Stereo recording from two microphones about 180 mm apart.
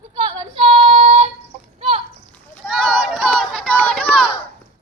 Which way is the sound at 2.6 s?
Centre (ahead or behind).